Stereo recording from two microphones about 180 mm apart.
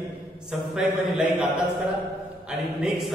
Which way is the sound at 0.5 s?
5° right (ahead or behind).